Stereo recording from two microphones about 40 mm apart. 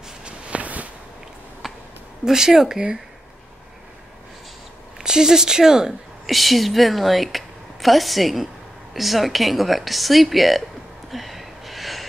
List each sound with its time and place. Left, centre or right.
0.2 s walk: right
1.6 s a sound: centre
2.2 s speech: centre
4.9 s speech: centre
6.2 s a woman's voice: centre
11.1 s a sound: centre